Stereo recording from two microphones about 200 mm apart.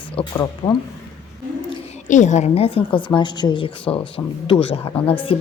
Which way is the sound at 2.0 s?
35° left (ahead or behind).